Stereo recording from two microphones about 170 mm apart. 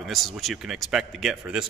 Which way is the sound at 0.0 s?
Centre (ahead or behind).